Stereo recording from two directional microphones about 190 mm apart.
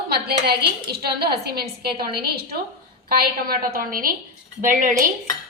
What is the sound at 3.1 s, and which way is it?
A woman's voice, 50° right (ahead or behind).